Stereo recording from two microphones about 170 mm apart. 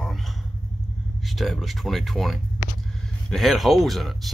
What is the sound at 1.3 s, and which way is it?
Speech, centre (ahead or behind).